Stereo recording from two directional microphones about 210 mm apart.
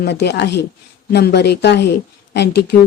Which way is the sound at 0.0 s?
50° left (ahead or behind).